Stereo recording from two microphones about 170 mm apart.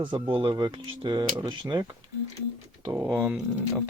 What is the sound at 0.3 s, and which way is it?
Speech, 25° right (ahead or behind).